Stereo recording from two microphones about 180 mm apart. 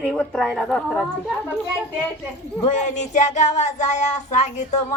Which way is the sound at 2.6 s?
40° left (ahead or behind).